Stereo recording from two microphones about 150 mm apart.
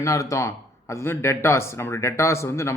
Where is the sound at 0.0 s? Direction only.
20° left (ahead or behind).